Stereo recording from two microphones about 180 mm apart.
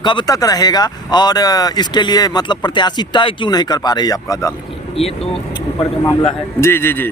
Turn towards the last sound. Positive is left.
turn(degrees=10)  # may be behind; listen again after turning